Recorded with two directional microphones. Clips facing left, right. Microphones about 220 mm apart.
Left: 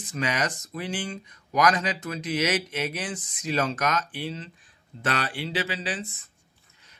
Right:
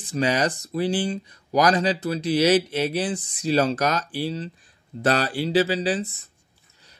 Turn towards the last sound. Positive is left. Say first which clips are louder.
# right 8 dB
turn(degrees=-35)  # may be behind; listen again after turning